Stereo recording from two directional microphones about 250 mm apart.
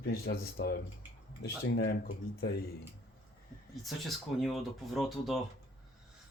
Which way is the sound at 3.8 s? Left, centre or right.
Centre.